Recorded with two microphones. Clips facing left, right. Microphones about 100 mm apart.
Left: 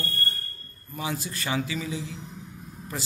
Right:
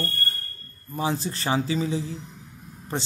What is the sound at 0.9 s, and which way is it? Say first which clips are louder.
Speech: right 5 dB; 30° right (ahead or behind).